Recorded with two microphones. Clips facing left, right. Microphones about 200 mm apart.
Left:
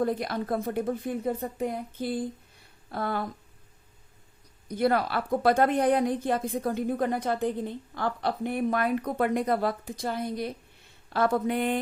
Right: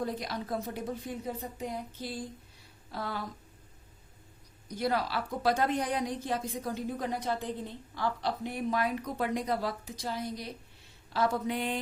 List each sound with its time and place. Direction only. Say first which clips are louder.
0.0 s a woman's voice: left 7 dB; 55° left (ahead or behind)
4.7 s a woman's voice: left 6 dB; 55° left (ahead or behind)